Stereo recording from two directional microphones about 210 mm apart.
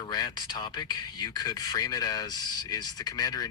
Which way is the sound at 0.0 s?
20° left (ahead or behind).